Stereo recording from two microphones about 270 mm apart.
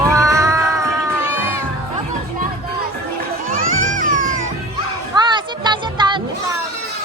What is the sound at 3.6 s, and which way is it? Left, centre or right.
Music, right.